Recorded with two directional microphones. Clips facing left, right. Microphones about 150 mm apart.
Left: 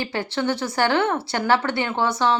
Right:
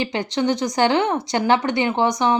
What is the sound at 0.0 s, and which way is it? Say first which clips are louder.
Speech: right 3 dB; 15° right (ahead or behind).